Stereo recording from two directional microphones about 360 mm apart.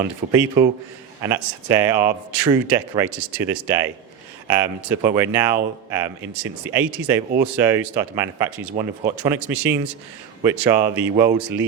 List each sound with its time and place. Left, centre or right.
0.0 s speech: centre